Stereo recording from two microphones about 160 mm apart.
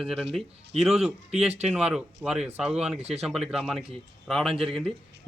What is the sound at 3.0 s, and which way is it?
Speech, 40° right (ahead or behind).